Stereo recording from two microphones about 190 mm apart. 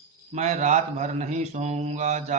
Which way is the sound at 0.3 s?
35° right (ahead or behind).